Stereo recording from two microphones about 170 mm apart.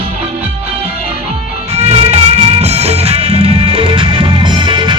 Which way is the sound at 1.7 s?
40° right (ahead or behind).